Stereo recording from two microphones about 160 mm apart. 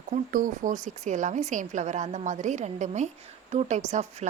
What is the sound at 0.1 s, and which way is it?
Speech, 55° right (ahead or behind).